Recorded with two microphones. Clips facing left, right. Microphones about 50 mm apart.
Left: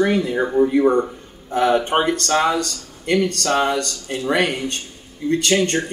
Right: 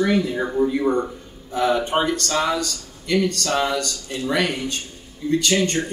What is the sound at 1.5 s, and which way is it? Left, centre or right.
Speech, left.